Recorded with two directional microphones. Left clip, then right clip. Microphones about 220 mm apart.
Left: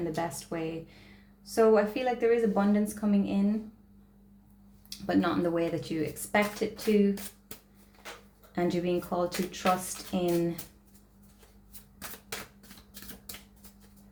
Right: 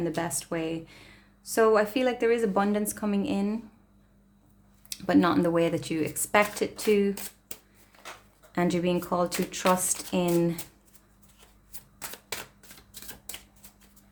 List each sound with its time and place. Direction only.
0.2 s speech: 45° right (ahead or behind)
4.9 s speech: 40° right (ahead or behind)
8.5 s speech: 40° right (ahead or behind)